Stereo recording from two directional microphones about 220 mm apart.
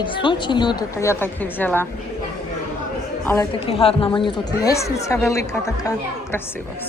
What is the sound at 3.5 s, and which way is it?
A woman's voice, 25° left (ahead or behind).